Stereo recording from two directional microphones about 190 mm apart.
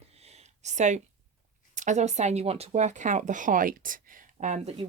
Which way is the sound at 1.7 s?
40° right (ahead or behind).